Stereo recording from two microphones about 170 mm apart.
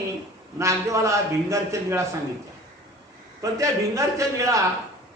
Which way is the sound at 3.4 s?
20° right (ahead or behind).